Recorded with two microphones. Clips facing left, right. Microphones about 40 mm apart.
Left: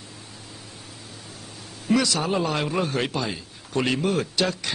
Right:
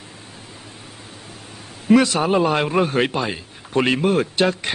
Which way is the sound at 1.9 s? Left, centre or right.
Right.